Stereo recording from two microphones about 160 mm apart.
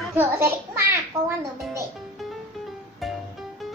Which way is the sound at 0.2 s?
15° right (ahead or behind).